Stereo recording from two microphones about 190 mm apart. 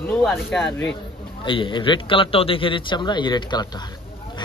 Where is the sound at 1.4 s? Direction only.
25° left (ahead or behind).